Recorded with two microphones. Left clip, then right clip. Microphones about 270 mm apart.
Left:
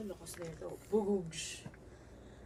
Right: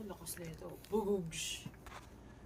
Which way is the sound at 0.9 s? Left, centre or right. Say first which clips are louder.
Left 3 dB; centre.